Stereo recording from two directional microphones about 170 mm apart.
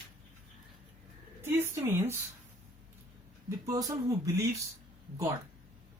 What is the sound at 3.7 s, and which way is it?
Speech, 20° right (ahead or behind).